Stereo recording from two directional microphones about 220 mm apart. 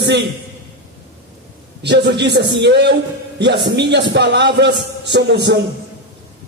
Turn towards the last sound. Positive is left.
turn(degrees=-50)  # may be behind; listen again after turning